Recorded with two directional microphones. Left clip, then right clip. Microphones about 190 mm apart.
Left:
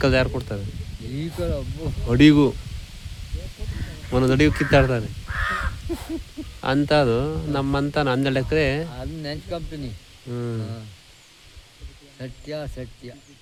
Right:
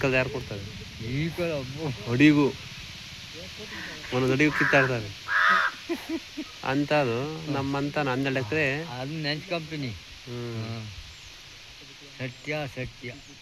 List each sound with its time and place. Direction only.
0.0 s a man's voice: 65° left (ahead or behind)
1.1 s speech: 15° left (ahead or behind)
2.0 s speech: 65° left (ahead or behind)
4.1 s a man's voice: 65° left (ahead or behind)
5.5 s crow: 75° left (ahead or behind)
6.6 s a man's voice: 60° left (ahead or behind)
8.9 s speech: 15° left (ahead or behind)
10.3 s a man's voice: 65° left (ahead or behind)
12.2 s speech: 15° left (ahead or behind)